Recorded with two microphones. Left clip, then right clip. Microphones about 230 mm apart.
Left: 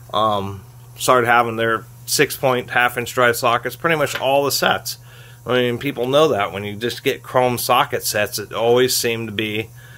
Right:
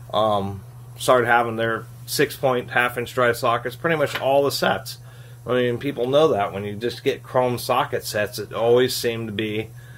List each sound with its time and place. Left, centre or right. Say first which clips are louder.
0.1 s speech: left 2 dB; left